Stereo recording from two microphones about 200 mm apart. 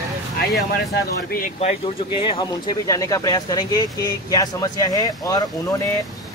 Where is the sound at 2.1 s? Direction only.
25° left (ahead or behind).